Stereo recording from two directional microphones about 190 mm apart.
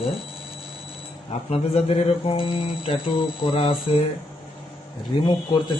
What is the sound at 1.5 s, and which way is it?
Speech, 35° left (ahead or behind).